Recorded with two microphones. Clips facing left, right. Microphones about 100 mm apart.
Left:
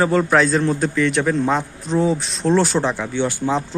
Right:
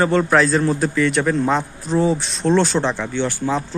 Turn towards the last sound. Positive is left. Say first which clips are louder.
# left 1 dB
turn(degrees=15)  # may be behind; listen again after turning